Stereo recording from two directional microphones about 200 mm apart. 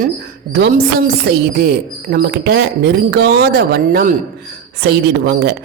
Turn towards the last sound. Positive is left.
turn(degrees=-55)  # may be behind; listen again after turning